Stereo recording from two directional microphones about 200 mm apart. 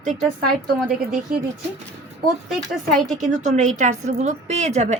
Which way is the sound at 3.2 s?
40° right (ahead or behind).